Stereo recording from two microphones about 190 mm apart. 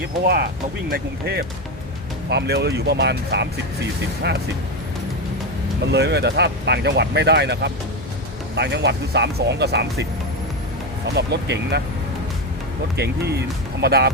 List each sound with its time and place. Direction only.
0.9 s speech: 55° right (ahead or behind)
5.9 s speech: 60° right (ahead or behind)
13.8 s speech: 60° right (ahead or behind)